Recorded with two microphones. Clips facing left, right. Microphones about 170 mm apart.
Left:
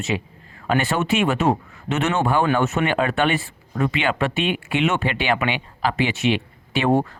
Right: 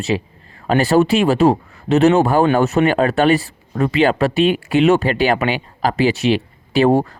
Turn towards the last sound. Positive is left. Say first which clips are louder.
# right 5 dB
turn(degrees=-35)  # may be behind; listen again after turning